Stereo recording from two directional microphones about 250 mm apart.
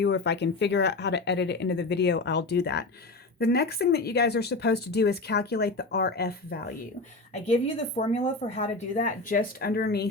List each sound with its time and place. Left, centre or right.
0.0 s speech: left
7.9 s speech: left